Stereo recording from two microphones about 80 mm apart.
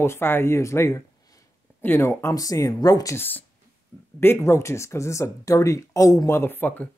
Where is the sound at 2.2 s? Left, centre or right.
Left.